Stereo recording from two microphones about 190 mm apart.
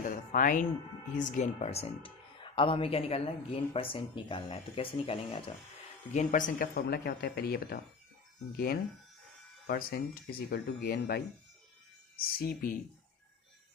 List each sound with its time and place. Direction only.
0.0 s music: 45° left (ahead or behind)
1.2 s speech: 40° left (ahead or behind)
6.1 s speech: 45° left (ahead or behind)